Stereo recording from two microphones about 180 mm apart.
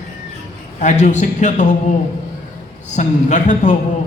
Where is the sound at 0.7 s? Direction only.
45° left (ahead or behind).